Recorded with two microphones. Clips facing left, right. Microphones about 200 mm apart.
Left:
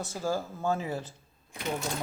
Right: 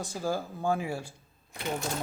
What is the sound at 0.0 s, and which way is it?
Speech, 15° right (ahead or behind).